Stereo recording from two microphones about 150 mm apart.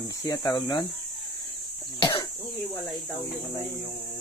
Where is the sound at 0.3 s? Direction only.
25° left (ahead or behind).